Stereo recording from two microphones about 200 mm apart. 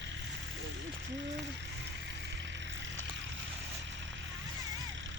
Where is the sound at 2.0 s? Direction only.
65° right (ahead or behind).